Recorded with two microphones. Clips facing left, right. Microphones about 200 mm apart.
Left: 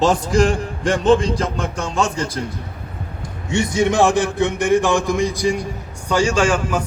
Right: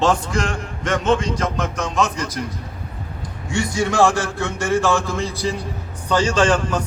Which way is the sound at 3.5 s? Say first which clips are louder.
Left 4 dB; 20° left (ahead or behind).